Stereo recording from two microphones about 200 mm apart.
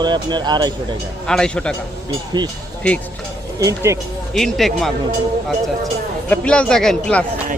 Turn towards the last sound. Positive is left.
turn(degrees=5)  # may be behind; listen again after turning